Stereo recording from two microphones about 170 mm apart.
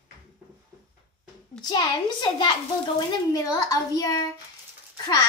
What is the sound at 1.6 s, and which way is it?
A child's voice, 25° left (ahead or behind).